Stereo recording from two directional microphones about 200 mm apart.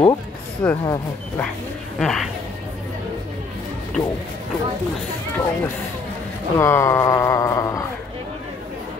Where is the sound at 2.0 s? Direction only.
Centre (ahead or behind).